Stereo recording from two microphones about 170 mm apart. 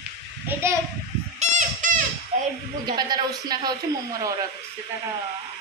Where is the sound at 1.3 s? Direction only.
45° right (ahead or behind).